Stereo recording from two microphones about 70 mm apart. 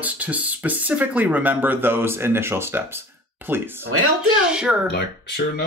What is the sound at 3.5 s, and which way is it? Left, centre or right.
Speech, right.